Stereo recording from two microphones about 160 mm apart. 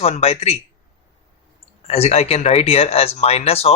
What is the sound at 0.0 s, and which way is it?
Speech, 40° left (ahead or behind).